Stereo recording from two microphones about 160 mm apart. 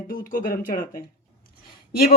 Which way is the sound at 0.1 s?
60° left (ahead or behind).